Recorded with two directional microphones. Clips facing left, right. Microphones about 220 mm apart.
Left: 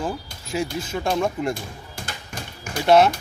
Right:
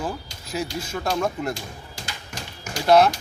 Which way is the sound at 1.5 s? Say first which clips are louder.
Left 2 dB; 55° left (ahead or behind).